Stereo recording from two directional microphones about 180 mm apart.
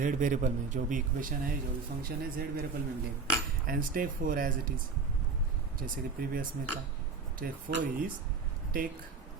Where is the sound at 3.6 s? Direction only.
50° right (ahead or behind).